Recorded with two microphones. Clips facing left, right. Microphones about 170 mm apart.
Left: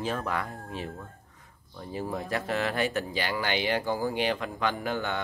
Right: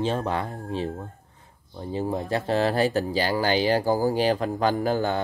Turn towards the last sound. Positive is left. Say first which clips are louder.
# right 7 dB
turn(degrees=-35)  # may be behind; listen again after turning